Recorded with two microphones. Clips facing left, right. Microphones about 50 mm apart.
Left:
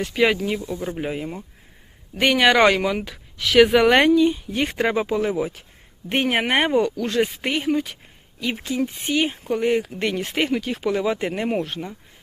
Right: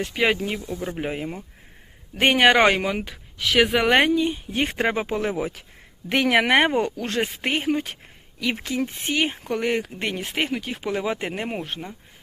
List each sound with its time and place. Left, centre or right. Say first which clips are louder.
0.1 s speech: left 3 dB; centre
0.6 s speech: left 2 dB; centre
0.9 s speech: even; right; by 3.9 s centre
3.9 s speech: left 3 dB; centre
5.2 s speech: left 2 dB; right
6.1 s speech: right 2 dB; right
6.7 s speech: left 3 dB; right
8.5 s speech: left 2 dB; right
9.9 s speech: left 4 dB; right
10.2 s speech: left 3 dB; centre